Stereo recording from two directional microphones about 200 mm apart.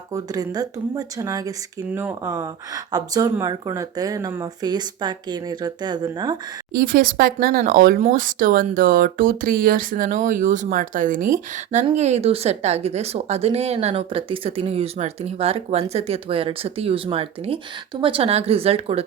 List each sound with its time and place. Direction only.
0.1 s speech: 20° right (ahead or behind)
6.7 s speech: 45° right (ahead or behind); by 19.0 s 30° right (ahead or behind)